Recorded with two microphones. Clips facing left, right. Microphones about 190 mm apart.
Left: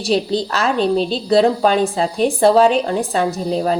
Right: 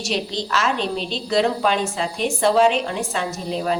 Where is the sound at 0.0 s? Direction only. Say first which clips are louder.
Left 7 dB; 35° left (ahead or behind).